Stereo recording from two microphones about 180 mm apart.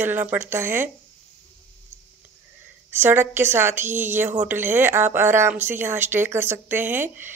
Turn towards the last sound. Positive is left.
turn(degrees=-10)  # may be behind; listen again after turning